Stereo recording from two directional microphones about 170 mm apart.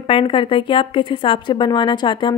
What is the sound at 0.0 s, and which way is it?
A woman's voice, 30° left (ahead or behind).